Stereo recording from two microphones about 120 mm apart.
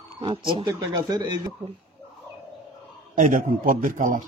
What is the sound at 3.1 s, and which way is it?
Speech, 90° right.